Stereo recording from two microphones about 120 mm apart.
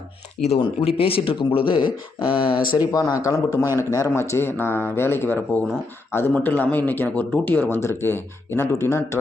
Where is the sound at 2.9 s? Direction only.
30° left (ahead or behind).